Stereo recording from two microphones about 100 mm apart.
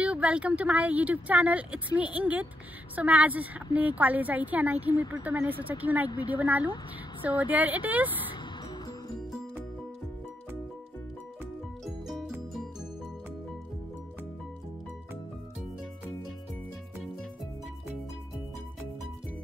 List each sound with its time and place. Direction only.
0.0 s speech: 15° right (ahead or behind)
6.0 s speech: 50° left (ahead or behind)
6.3 s speech: 15° right (ahead or behind)
11.8 s music: centre (ahead or behind)